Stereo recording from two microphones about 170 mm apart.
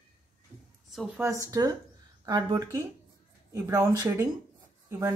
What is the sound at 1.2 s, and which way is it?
A woman's voice, 20° right (ahead or behind).